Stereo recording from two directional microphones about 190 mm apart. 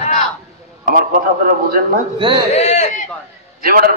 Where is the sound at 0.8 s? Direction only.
45° right (ahead or behind).